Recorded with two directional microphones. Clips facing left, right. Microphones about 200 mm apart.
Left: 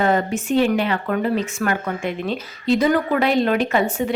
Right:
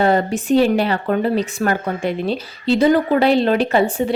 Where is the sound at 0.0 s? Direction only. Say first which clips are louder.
Right 3 dB; 35° right (ahead or behind).